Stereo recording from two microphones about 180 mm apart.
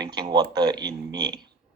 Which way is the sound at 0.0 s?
25° right (ahead or behind).